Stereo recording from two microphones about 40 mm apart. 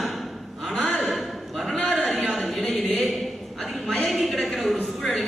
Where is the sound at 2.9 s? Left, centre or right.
Left.